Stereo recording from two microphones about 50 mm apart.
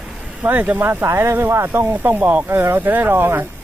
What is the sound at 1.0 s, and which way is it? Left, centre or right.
Speech, right.